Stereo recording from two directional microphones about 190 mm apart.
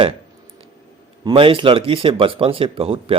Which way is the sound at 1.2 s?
25° right (ahead or behind).